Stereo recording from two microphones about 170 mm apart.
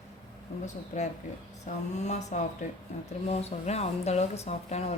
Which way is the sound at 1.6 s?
45° left (ahead or behind).